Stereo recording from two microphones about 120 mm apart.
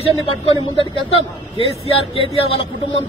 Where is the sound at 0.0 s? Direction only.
50° left (ahead or behind).